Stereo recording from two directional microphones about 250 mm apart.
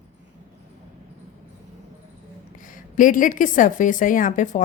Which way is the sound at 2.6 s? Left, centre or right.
Left.